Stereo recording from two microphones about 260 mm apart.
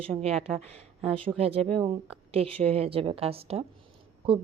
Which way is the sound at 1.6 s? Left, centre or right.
Centre.